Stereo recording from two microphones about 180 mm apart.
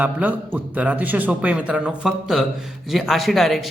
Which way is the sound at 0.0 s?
10° right (ahead or behind).